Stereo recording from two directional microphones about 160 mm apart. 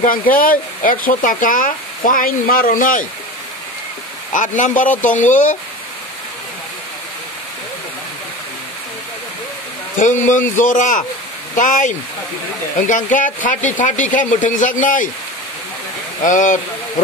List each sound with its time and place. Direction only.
0.0 s speech: 60° left (ahead or behind)
4.3 s speech: 55° left (ahead or behind)
9.9 s speech: 55° left (ahead or behind)
16.2 s speech: 55° left (ahead or behind)